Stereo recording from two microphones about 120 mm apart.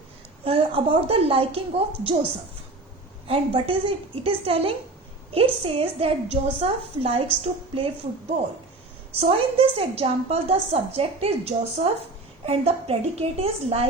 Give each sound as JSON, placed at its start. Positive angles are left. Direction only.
{"t": 0.4, "sound": "a woman's voice", "side_deg": -50}
{"t": 3.2, "sound": "a woman's voice", "side_deg": -50}
{"t": 9.1, "sound": "a woman's voice", "side_deg": -55}